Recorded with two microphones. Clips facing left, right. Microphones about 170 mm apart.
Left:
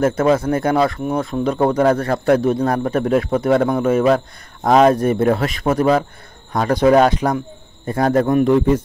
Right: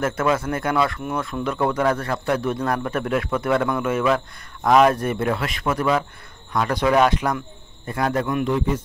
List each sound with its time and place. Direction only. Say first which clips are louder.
0.0 s a man's voice: left 6 dB; 40° left (ahead or behind); by 8.8 s 55° left (ahead or behind)